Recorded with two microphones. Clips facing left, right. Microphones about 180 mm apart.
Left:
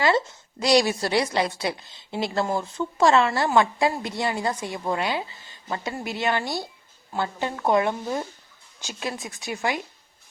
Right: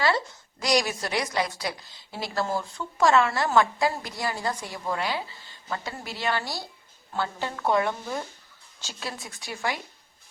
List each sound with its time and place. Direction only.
0.0 s a woman's voice: 20° left (ahead or behind)